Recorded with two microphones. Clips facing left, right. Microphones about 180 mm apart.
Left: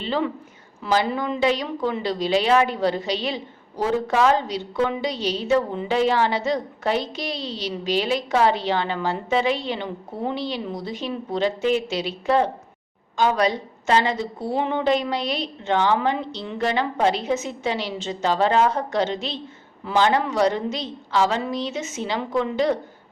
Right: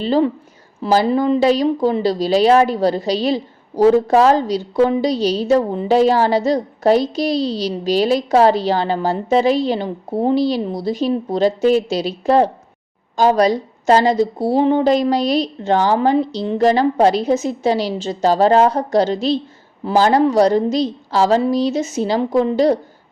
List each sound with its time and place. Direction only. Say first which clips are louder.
0.0 s a woman's voice: right 8 dB; 35° right (ahead or behind)